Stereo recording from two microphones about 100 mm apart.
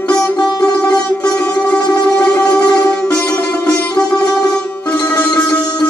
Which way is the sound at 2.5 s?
10° left (ahead or behind).